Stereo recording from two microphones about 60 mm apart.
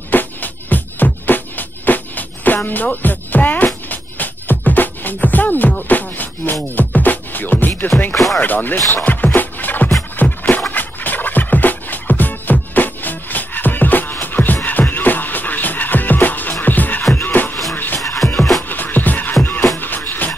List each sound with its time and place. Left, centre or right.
0.1 s music: left
8.1 s speech: centre
8.4 s music: left
18.2 s music: centre
18.7 s music: left